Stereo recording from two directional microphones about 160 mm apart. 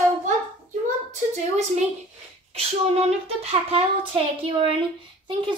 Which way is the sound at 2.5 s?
40° right (ahead or behind).